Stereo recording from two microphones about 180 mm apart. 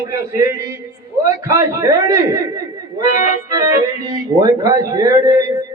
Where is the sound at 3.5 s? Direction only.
20° right (ahead or behind).